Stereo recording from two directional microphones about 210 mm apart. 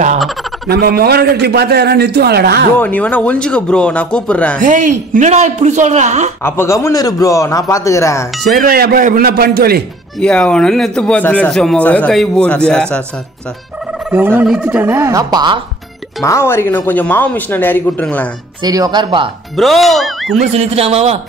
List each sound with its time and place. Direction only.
0.2 s speech: centre (ahead or behind)
0.7 s a man's voice: 45° right (ahead or behind)
2.8 s speech: 10° left (ahead or behind)
4.6 s speech: 40° right (ahead or behind)
6.4 s speech: 10° left (ahead or behind)
8.5 s a man's voice: 45° right (ahead or behind)
10.1 s speech: 5° left (ahead or behind)
14.1 s speech: 10° right (ahead or behind)
16.3 s speech: 10° left (ahead or behind)
18.6 s speech: 20° right (ahead or behind)
19.5 s speech: centre (ahead or behind)
20.5 s speech: 30° right (ahead or behind)